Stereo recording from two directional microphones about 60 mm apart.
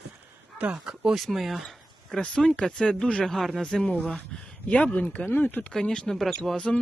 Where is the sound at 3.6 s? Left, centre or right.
Centre.